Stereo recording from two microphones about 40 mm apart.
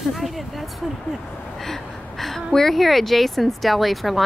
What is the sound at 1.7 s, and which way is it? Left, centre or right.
A woman's voice, centre.